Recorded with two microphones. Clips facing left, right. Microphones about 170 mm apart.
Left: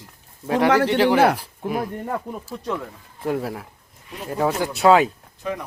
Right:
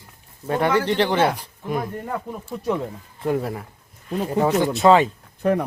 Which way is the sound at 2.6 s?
15° right (ahead or behind).